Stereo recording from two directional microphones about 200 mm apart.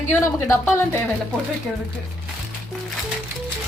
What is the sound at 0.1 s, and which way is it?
Speech, 15° left (ahead or behind).